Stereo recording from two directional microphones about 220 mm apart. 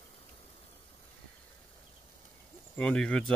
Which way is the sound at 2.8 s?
5° left (ahead or behind).